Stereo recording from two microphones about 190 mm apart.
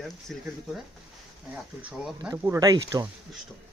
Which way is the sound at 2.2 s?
15° right (ahead or behind).